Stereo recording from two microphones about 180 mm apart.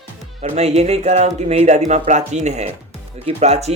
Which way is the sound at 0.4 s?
35° right (ahead or behind).